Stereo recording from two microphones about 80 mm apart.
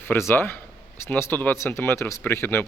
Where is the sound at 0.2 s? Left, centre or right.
Left.